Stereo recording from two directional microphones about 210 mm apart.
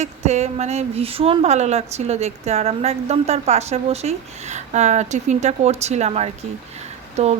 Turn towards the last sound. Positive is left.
turn(degrees=-30)  # may be behind; listen again after turning